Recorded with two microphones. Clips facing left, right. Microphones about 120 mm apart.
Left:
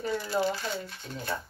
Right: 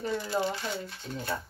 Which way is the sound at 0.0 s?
25° right (ahead or behind).